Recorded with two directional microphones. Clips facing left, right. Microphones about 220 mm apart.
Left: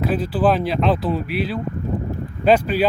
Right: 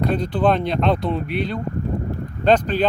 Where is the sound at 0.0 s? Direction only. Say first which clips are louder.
Even; 5° left (ahead or behind).